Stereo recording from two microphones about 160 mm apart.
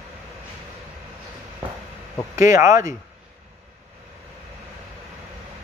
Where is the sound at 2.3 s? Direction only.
20° right (ahead or behind).